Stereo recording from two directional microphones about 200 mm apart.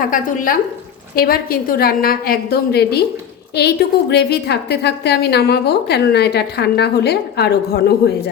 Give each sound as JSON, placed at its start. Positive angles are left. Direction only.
{"t": 0.0, "sound": "a woman's voice", "side_deg": 40}
{"t": 4.1, "sound": "a woman's voice", "side_deg": 55}